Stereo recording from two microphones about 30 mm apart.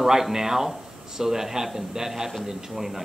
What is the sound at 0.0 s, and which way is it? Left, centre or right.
A man's voice, centre.